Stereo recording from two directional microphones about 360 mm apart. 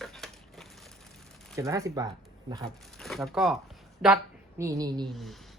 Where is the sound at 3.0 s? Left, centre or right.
Centre.